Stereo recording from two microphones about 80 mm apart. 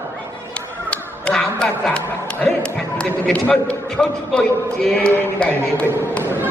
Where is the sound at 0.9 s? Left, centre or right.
Centre.